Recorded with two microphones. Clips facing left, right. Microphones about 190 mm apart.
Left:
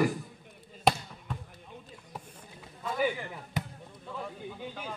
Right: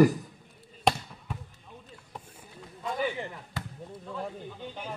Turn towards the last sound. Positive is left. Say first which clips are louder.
# left 3 dB
turn(degrees=20)  # may be behind; listen again after turning